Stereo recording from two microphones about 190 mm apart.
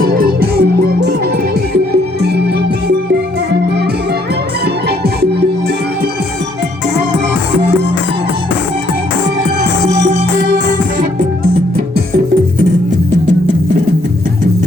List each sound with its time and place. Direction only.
0.0 s music: 50° right (ahead or behind)